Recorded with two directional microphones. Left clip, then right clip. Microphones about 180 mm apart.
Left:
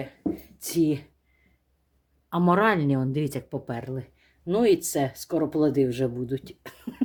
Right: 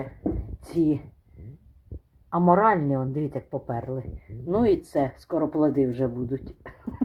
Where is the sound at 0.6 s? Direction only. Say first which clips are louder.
Even; 10° left (ahead or behind).